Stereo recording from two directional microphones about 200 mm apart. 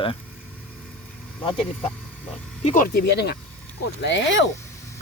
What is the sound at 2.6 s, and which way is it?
Speech, 40° left (ahead or behind).